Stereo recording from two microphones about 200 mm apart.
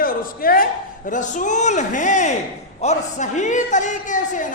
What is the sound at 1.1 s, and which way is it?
A man's voice, 40° left (ahead or behind).